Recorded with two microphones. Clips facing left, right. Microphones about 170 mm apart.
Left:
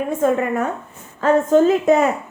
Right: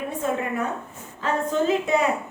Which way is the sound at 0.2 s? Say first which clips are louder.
Left 7 dB; 45° left (ahead or behind).